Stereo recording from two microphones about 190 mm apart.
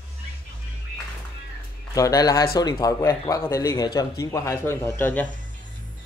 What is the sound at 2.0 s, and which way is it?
A man's voice, 20° left (ahead or behind).